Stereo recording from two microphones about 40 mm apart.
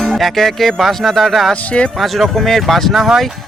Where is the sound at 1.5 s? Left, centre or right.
Left.